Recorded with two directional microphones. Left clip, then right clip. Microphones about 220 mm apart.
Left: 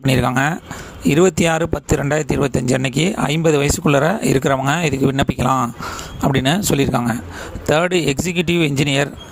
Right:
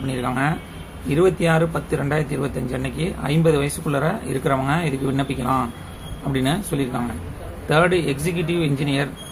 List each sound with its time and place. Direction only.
0.1 s speech: 50° left (ahead or behind)